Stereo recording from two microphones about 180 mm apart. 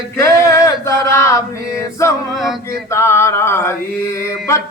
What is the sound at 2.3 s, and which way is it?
Female singing, centre (ahead or behind).